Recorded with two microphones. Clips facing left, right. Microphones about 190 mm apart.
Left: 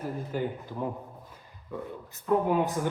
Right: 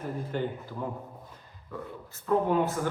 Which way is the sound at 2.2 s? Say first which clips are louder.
Even; 15° left (ahead or behind).